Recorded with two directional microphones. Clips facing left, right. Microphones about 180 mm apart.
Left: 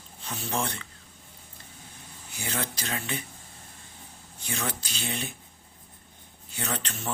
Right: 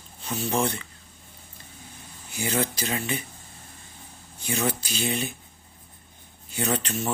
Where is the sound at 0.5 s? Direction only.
5° right (ahead or behind).